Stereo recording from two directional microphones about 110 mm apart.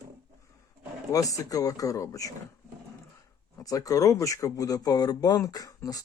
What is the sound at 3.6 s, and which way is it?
Speech, 35° left (ahead or behind).